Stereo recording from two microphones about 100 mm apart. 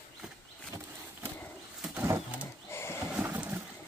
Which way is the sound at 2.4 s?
25° left (ahead or behind).